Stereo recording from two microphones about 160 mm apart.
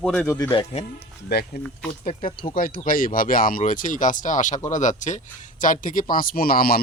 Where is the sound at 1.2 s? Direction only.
70° left (ahead or behind).